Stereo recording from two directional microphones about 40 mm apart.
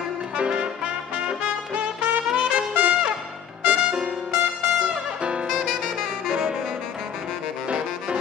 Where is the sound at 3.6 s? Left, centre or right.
Right.